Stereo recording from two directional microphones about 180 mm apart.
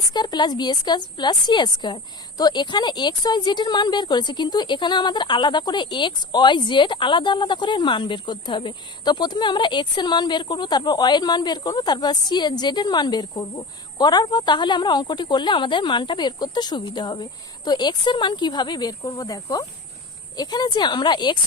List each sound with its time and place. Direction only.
0.1 s speech: 25° left (ahead or behind)